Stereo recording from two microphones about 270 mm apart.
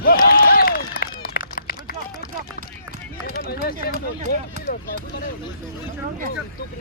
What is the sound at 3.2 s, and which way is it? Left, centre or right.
Speech, left.